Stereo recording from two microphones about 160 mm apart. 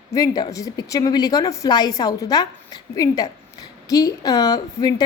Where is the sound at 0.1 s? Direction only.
20° left (ahead or behind).